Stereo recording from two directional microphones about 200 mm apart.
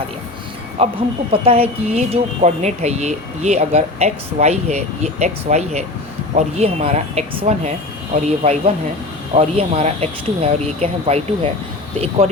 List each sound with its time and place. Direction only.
0.8 s speech: 30° right (ahead or behind)